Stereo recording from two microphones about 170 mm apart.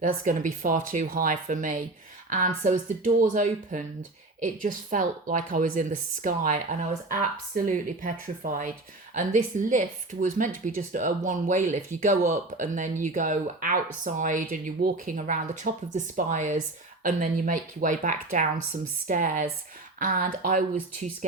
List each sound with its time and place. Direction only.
0.0 s speech: 50° right (ahead or behind)